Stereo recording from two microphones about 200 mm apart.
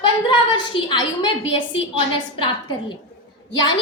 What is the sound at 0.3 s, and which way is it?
A woman's voice, 25° left (ahead or behind).